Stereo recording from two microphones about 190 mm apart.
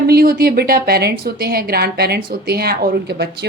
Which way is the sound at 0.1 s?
55° right (ahead or behind).